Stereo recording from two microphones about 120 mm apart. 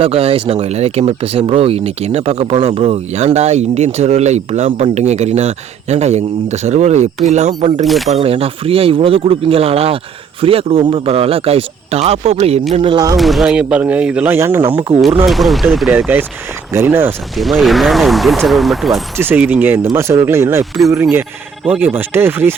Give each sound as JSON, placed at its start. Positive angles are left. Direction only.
{"t": 0.0, "sound": "speech", "side_deg": -50}
{"t": 7.9, "sound": "speech", "side_deg": 0}
{"t": 8.1, "sound": "speech", "side_deg": -55}
{"t": 12.7, "sound": "speech", "side_deg": -45}
{"t": 13.1, "sound": "speech", "side_deg": 0}
{"t": 15.3, "sound": "speech", "side_deg": 0}
{"t": 15.9, "sound": "speech", "side_deg": -10}
{"t": 17.3, "sound": "speech", "side_deg": 0}
{"t": 19.1, "sound": "speech", "side_deg": -20}